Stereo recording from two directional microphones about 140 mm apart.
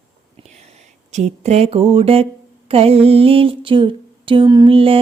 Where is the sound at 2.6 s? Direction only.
45° right (ahead or behind).